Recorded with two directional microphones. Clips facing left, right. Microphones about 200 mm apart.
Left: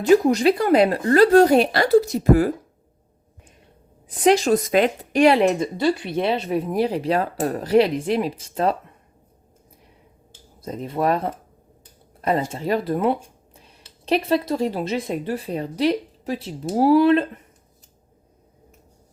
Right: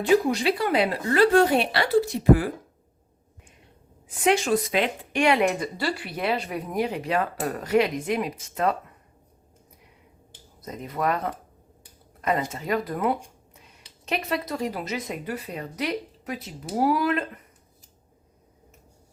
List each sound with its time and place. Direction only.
0.0 s speech: 45° left (ahead or behind)
4.1 s speech: 35° left (ahead or behind)
10.6 s speech: 30° left (ahead or behind)